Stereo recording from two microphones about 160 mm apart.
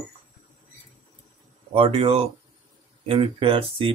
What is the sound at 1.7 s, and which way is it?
Speech, 35° right (ahead or behind).